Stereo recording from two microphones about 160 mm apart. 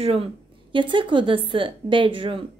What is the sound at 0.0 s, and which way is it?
A woman's voice, 40° right (ahead or behind).